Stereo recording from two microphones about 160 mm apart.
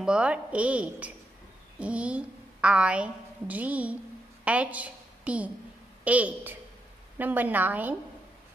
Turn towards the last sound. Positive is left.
turn(degrees=-10)  # may be behind; listen again after turning